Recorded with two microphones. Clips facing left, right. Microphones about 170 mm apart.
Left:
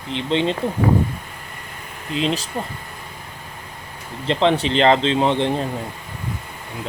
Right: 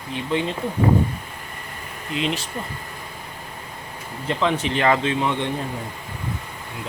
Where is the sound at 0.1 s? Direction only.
25° left (ahead or behind).